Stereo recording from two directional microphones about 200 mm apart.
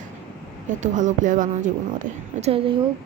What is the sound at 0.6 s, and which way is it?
A woman's voice, 40° right (ahead or behind).